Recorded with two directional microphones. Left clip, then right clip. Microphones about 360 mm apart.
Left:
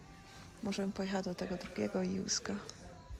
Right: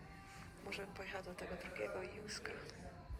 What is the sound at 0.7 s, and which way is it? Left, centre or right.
Speech, centre.